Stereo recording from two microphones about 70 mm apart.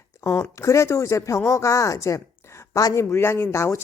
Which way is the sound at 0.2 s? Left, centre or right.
Left.